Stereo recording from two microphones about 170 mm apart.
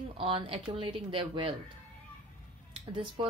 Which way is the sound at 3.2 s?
30° right (ahead or behind).